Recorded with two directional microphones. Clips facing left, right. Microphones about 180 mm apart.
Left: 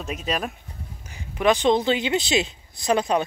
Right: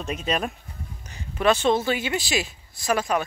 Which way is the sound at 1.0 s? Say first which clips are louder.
Left 1 dB; 15° left (ahead or behind).